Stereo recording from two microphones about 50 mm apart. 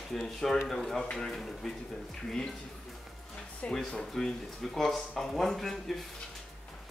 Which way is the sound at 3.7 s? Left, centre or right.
Centre.